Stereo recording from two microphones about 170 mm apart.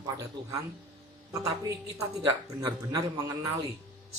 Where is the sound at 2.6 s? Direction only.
25° right (ahead or behind).